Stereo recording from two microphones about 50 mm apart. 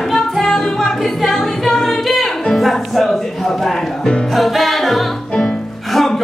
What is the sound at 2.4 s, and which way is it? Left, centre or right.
Speech, centre.